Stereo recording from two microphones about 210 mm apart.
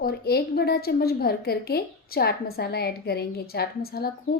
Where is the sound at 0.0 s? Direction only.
50° left (ahead or behind).